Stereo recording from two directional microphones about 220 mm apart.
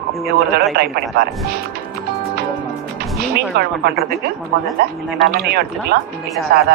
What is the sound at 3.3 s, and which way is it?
Speech, 45° right (ahead or behind).